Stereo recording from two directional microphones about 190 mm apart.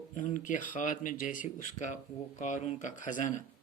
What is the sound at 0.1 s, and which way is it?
A man's voice, 40° left (ahead or behind).